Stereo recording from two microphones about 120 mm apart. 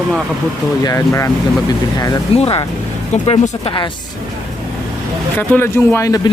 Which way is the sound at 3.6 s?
40° left (ahead or behind).